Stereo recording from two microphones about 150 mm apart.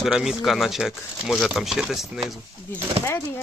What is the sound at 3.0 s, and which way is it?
Speech, 15° left (ahead or behind).